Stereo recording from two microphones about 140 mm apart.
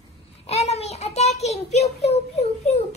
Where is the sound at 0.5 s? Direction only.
50° left (ahead or behind).